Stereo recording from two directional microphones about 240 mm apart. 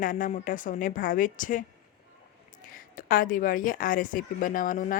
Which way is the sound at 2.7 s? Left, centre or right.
Left.